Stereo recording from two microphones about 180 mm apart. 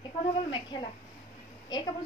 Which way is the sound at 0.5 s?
25° left (ahead or behind).